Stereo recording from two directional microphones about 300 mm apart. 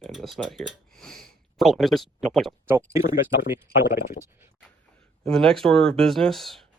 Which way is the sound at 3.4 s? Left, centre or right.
Left.